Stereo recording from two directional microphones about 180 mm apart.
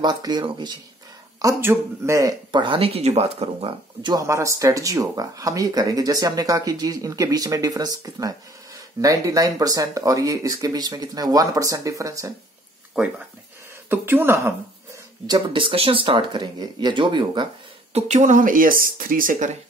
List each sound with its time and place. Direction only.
0.0 s speech: 25° right (ahead or behind)
13.0 s a woman's voice: 5° right (ahead or behind)
15.2 s speech: 25° right (ahead or behind)
17.9 s speech: 40° right (ahead or behind)